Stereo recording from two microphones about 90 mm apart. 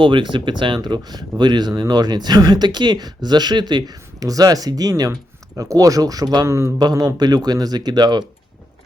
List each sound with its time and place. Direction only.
0.0 s speech: 65° right (ahead or behind); by 6.5 s 45° right (ahead or behind)
6.5 s speech: 35° right (ahead or behind)
6.7 s speech: 45° right (ahead or behind)